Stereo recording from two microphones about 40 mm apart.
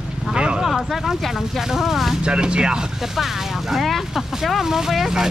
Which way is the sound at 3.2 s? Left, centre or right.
Centre.